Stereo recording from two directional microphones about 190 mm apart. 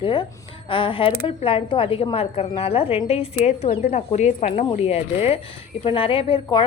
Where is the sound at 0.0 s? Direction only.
25° left (ahead or behind).